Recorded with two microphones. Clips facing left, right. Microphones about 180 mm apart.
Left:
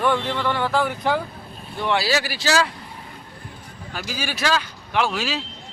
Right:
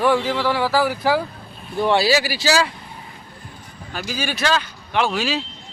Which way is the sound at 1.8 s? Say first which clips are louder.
Right 5 dB; 30° right (ahead or behind).